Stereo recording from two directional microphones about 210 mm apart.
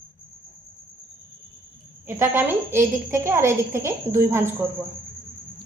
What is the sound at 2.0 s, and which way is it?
A woman's voice, 10° right (ahead or behind).